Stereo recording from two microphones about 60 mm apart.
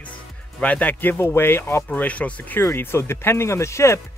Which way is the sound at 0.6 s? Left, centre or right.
Left.